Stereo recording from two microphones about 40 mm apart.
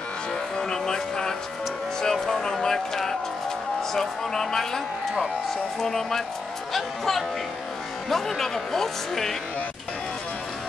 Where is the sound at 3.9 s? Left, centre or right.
Centre.